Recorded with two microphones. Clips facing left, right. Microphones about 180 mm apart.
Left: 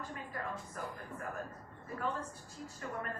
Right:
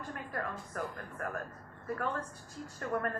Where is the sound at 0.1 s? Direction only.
55° right (ahead or behind).